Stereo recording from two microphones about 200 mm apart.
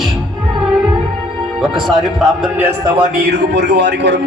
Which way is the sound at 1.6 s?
Centre (ahead or behind).